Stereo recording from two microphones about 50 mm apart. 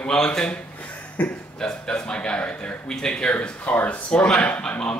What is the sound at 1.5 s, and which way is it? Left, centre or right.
A man's voice, centre.